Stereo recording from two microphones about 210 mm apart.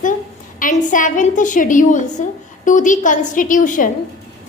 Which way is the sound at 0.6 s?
40° left (ahead or behind).